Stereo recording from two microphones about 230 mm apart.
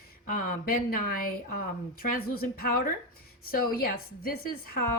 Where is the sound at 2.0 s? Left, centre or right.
Left.